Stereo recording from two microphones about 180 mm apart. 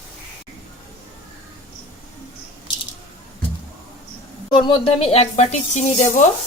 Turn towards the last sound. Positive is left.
turn(degrees=45)  # may be behind; listen again after turning